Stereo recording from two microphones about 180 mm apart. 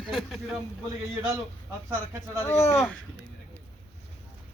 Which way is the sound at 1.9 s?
15° right (ahead or behind).